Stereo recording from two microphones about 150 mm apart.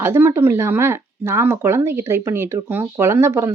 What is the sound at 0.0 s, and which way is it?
Speech, 15° right (ahead or behind).